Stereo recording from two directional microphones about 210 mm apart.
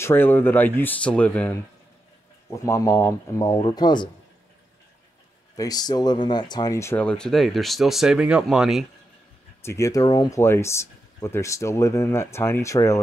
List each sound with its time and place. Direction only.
0.0 s speech: 10° left (ahead or behind)
5.6 s speech: 20° left (ahead or behind); by 8.8 s centre (ahead or behind)
9.6 s speech: 15° left (ahead or behind)